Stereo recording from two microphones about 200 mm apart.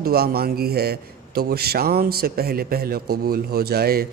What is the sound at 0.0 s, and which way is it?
Speech, 50° right (ahead or behind).